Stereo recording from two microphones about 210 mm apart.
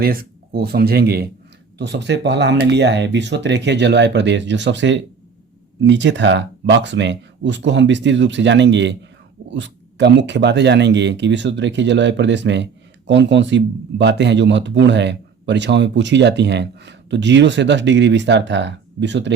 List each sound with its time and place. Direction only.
0.0 s speech: 45° right (ahead or behind)